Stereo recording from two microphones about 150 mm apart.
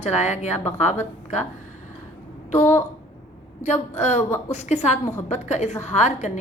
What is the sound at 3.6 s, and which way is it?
A woman's voice, 50° left (ahead or behind).